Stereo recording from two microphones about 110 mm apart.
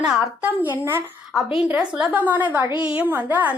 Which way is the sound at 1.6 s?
10° right (ahead or behind).